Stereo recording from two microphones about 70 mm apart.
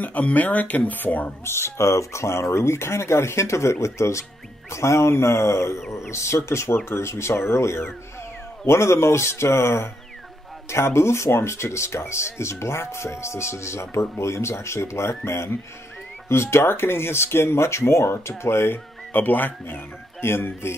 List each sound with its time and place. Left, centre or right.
0.0 s speech: left
1.4 s speech: left